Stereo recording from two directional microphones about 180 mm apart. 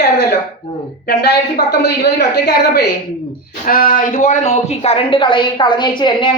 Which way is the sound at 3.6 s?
50° left (ahead or behind).